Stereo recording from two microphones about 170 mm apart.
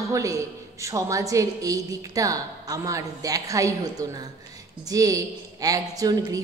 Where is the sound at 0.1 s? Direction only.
20° right (ahead or behind).